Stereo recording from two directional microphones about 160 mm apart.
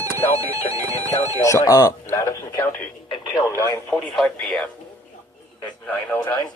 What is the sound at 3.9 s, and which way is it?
Speech, 5° left (ahead or behind).